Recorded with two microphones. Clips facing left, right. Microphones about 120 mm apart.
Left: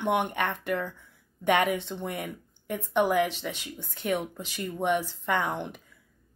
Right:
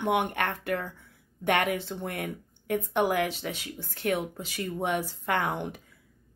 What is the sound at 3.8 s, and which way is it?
Speech, centre (ahead or behind).